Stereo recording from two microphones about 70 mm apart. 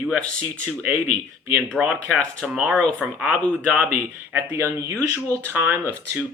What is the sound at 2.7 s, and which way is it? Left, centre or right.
Speech, centre.